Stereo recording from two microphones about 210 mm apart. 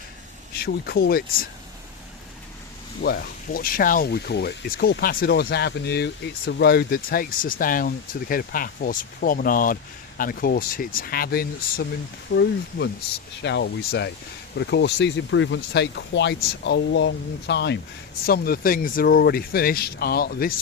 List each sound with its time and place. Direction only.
0.5 s speech: 50° left (ahead or behind)
3.0 s speech: 50° left (ahead or behind)